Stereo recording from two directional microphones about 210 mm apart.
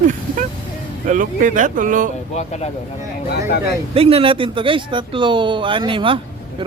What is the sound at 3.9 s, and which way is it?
Speech, 25° right (ahead or behind).